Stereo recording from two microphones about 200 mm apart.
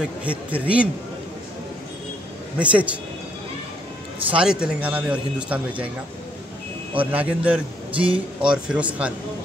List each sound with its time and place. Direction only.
0.0 s a man's voice: 5° right (ahead or behind)
2.6 s a man's voice: 5° right (ahead or behind)
4.4 s a man's voice: 5° right (ahead or behind)
7.0 s a man's voice: 10° right (ahead or behind)
7.9 s speech: 25° right (ahead or behind)
8.4 s speech: 5° right (ahead or behind)